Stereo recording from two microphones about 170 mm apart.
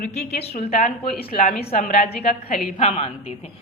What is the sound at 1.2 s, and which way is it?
A woman's voice, 60° left (ahead or behind).